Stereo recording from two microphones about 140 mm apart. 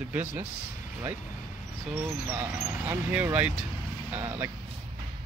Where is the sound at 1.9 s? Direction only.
15° right (ahead or behind).